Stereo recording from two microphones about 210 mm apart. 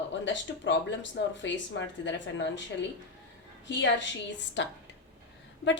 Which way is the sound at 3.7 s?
60° left (ahead or behind).